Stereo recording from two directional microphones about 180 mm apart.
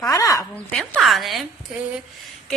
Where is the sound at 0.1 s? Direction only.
20° left (ahead or behind).